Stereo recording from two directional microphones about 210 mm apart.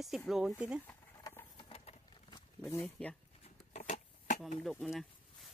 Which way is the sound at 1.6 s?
25° left (ahead or behind).